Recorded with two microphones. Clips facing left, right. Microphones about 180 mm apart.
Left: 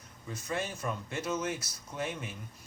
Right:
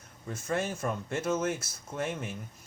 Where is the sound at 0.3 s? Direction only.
50° right (ahead or behind).